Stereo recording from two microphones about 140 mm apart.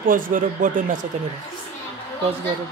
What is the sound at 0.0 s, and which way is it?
Speech, 75° right (ahead or behind).